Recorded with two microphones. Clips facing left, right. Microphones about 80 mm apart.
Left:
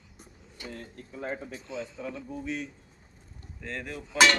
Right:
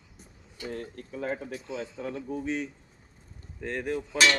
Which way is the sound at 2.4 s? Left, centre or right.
Right.